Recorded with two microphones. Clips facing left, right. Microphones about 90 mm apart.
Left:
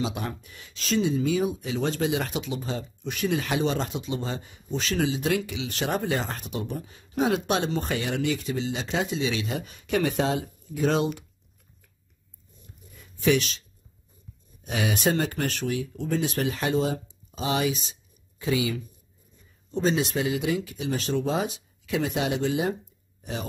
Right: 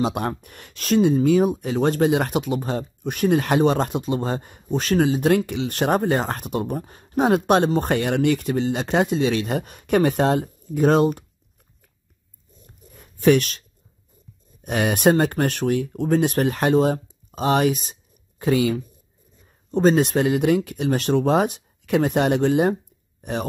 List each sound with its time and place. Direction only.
0.0 s speech: 50° right (ahead or behind)
12.8 s a sound: 45° right (ahead or behind)
14.6 s speech: 55° right (ahead or behind)